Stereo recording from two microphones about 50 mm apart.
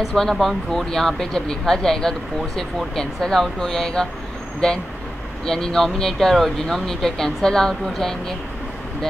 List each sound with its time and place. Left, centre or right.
0.1 s speech: centre